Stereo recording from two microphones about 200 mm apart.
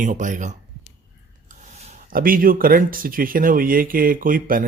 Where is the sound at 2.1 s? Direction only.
45° right (ahead or behind).